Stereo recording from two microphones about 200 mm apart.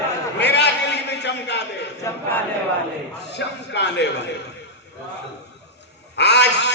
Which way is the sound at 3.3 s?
60° left (ahead or behind).